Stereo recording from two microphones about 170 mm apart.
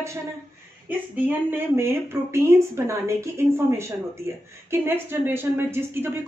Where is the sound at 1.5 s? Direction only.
15° right (ahead or behind).